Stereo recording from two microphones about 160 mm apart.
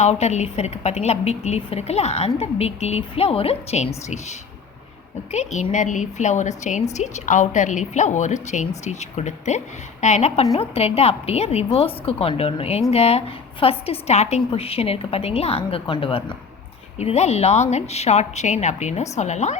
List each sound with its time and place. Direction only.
0.0 s a woman's voice: 45° left (ahead or behind)